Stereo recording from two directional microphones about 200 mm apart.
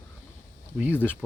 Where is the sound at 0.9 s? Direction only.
10° left (ahead or behind).